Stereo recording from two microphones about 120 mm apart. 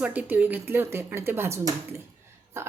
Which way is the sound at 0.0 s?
10° right (ahead or behind).